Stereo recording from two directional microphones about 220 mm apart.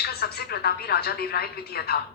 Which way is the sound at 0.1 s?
45° left (ahead or behind).